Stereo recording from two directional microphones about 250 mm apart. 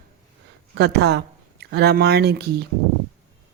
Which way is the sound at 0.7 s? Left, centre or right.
Right.